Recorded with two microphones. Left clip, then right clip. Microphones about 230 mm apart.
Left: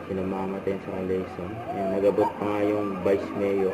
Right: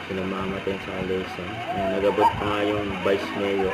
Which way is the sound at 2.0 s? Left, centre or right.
Right.